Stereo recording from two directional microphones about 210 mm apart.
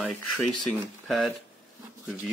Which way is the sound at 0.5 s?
20° right (ahead or behind).